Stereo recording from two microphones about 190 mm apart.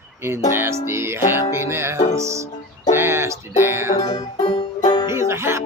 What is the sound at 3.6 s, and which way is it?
Music, 10° right (ahead or behind).